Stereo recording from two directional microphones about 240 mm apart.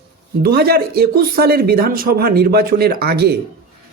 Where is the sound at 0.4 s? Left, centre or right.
Right.